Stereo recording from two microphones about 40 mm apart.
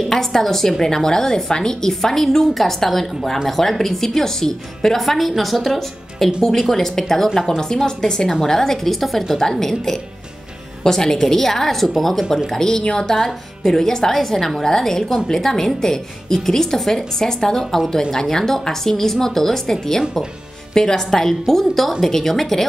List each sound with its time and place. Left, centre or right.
0.1 s a woman's voice: centre
12.4 s a woman's voice: centre